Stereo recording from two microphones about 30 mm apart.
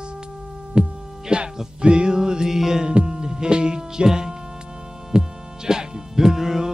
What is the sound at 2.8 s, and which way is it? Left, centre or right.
Music, right.